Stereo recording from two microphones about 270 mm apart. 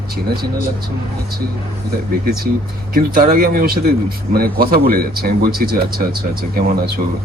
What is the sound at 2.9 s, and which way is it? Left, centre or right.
Speech, right.